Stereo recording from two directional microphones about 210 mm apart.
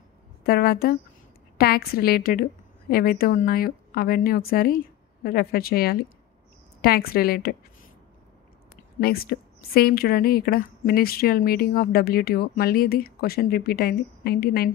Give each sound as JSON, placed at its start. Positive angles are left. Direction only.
{"t": 0.5, "sound": "speech", "side_deg": 45}
{"t": 9.0, "sound": "speech", "side_deg": 45}